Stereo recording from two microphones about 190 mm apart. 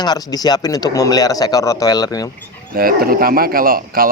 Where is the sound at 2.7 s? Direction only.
50° right (ahead or behind).